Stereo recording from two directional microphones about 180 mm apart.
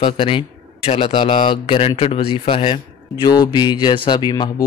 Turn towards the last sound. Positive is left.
turn(degrees=25)  # may be behind; listen again after turning